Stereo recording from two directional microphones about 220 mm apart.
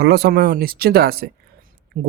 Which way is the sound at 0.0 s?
45° right (ahead or behind).